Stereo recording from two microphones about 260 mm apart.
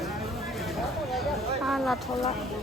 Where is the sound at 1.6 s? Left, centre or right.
Centre.